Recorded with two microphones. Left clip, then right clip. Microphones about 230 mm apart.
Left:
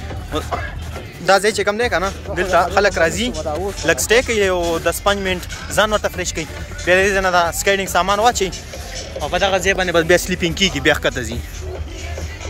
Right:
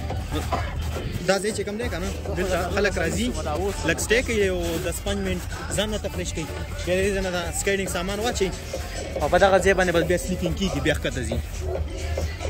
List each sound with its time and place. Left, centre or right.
1.2 s speech: centre
5.9 s speech: left
7.0 s speech: centre
9.2 s speech: right
10.0 s speech: centre